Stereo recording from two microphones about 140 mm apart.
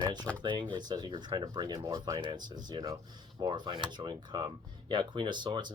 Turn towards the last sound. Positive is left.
turn(degrees=-35)  # may be behind; listen again after turning